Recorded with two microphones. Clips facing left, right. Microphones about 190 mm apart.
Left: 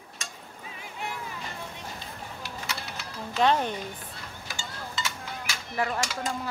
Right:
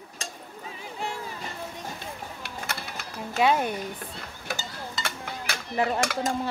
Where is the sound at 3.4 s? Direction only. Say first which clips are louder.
Right 1 dB; 10° right (ahead or behind).